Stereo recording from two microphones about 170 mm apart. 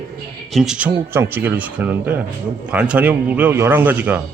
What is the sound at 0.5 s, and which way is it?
Speech, centre (ahead or behind).